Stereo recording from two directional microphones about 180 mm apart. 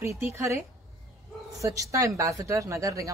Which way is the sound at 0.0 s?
15° right (ahead or behind).